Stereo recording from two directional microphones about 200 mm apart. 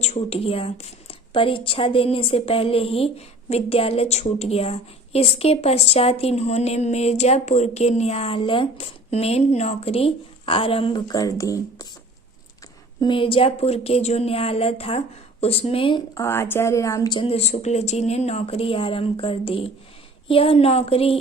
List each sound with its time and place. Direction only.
0.0 s a woman's voice: 30° left (ahead or behind); by 11.9 s 15° left (ahead or behind)
13.0 s speech: 25° left (ahead or behind)